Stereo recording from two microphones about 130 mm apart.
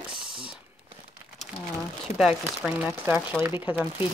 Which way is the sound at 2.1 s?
5° right (ahead or behind).